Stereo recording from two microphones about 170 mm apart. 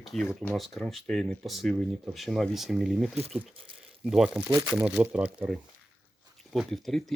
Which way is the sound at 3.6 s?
30° right (ahead or behind).